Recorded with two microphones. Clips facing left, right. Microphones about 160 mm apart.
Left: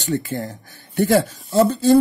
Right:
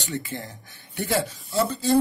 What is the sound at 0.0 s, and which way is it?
Speech, 45° left (ahead or behind).